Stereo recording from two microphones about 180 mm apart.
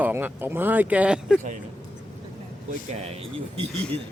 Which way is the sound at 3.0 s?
35° right (ahead or behind).